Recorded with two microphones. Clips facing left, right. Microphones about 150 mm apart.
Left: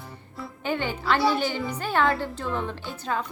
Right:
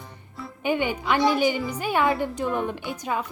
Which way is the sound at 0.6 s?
15° right (ahead or behind).